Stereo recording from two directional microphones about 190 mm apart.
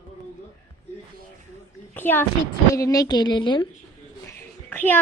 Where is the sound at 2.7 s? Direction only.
15° left (ahead or behind).